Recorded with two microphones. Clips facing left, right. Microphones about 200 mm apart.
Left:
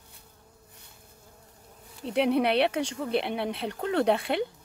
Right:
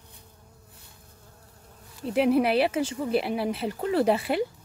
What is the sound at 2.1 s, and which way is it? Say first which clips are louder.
Speech: right 2 dB; 5° right (ahead or behind).